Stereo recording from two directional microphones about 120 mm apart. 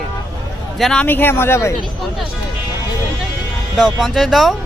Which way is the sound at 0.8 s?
5° left (ahead or behind).